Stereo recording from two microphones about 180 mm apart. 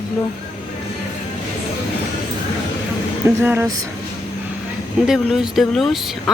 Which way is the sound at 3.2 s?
10° right (ahead or behind).